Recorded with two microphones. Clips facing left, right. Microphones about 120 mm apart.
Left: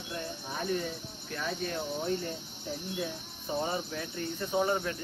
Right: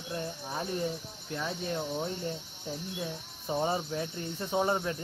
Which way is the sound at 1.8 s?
Centre (ahead or behind).